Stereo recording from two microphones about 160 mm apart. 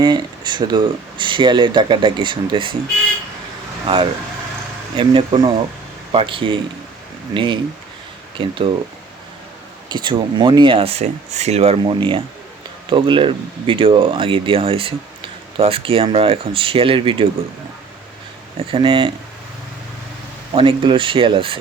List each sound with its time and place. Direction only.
0.0 s speech: 30° right (ahead or behind)
3.8 s speech: 35° right (ahead or behind)
9.9 s speech: 30° right (ahead or behind)
18.7 s speech: 35° right (ahead or behind)
20.5 s speech: 30° right (ahead or behind)